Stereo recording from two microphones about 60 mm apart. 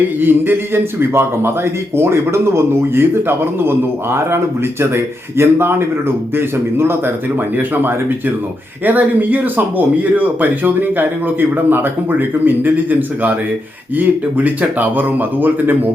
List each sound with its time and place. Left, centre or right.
0.2 s a man's voice: right